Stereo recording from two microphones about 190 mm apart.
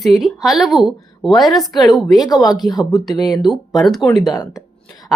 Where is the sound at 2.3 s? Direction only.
20° left (ahead or behind).